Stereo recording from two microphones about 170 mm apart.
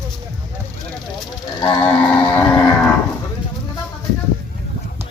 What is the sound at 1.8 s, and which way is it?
Vehicle, 5° left (ahead or behind).